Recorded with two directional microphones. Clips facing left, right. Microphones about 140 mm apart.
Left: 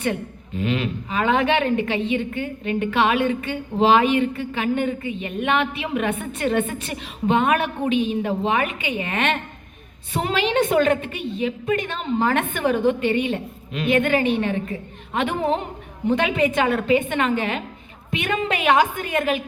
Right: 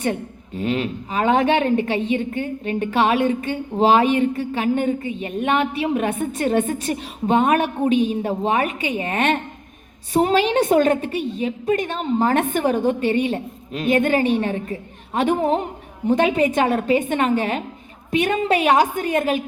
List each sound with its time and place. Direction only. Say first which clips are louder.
0.6 s a woman's voice: right 1 dB; 40° right (ahead or behind)